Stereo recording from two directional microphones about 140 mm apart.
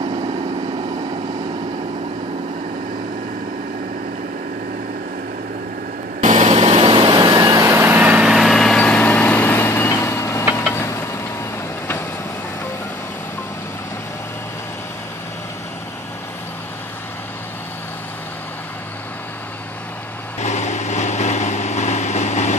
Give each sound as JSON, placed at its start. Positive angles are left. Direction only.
{"t": 6.2, "sound": "vehicle", "side_deg": -55}
{"t": 20.4, "sound": "vehicle", "side_deg": 55}